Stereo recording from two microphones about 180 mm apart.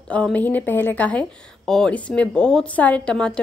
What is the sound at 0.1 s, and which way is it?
A woman's voice, 10° left (ahead or behind).